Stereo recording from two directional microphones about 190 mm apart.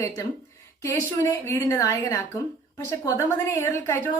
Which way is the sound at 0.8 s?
15° left (ahead or behind).